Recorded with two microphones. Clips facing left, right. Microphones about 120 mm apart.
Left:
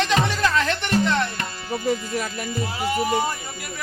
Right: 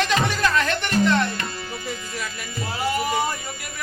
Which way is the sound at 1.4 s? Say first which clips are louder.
Left 5 dB; 45° left (ahead or behind).